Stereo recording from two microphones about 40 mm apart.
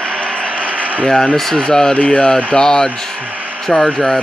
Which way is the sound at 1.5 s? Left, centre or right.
Centre.